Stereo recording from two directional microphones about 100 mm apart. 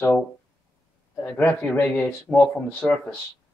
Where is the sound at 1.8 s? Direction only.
10° left (ahead or behind).